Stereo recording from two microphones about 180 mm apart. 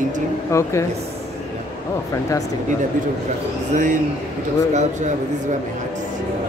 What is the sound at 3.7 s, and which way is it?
Speech, 45° right (ahead or behind).